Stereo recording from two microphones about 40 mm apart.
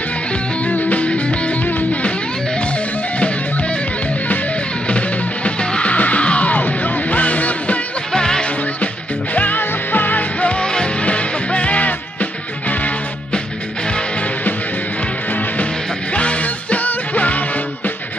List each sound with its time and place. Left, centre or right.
0.7 s music: left
4.8 s music: left
8.1 s music: centre
9.3 s music: left
9.6 s music: left
10.4 s music: left
11.1 s music: left
16.1 s music: left